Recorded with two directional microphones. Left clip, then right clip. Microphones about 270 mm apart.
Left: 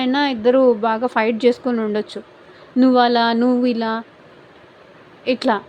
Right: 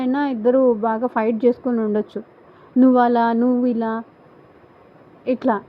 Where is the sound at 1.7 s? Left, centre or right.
Centre.